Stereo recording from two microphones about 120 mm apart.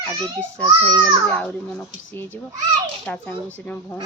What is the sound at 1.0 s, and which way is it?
A child's voice, 15° left (ahead or behind).